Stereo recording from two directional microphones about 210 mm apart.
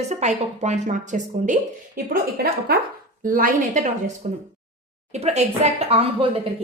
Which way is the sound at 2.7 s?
45° right (ahead or behind).